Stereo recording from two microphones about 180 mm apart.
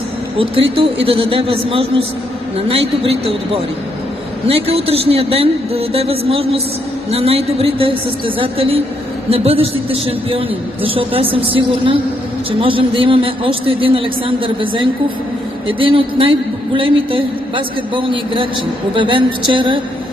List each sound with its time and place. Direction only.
1.0 s a man's voice: 30° right (ahead or behind)